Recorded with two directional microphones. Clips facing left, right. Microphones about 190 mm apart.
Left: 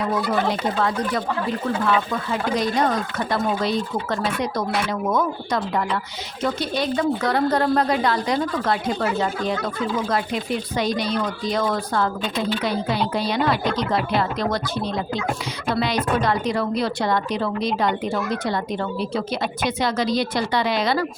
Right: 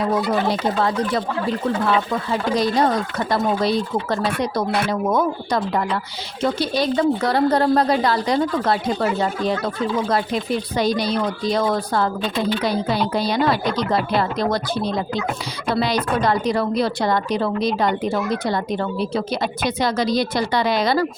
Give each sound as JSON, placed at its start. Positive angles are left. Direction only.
{"t": 2.3, "sound": "a woman's voice", "side_deg": -35}
{"t": 10.8, "sound": "a woman's voice", "side_deg": -35}
{"t": 13.1, "sound": "a woman's voice", "side_deg": -40}
{"t": 19.1, "sound": "a woman's voice", "side_deg": -35}